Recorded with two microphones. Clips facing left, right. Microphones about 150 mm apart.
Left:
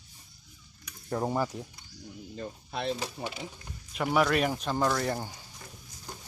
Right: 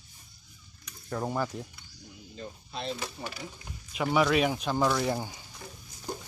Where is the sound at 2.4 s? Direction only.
60° left (ahead or behind).